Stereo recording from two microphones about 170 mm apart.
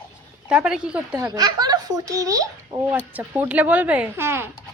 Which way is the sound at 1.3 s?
25° right (ahead or behind).